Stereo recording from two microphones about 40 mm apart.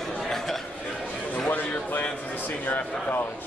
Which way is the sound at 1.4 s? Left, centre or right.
Left.